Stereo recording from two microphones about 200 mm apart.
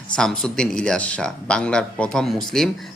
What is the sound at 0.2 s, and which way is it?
Speech, 5° left (ahead or behind).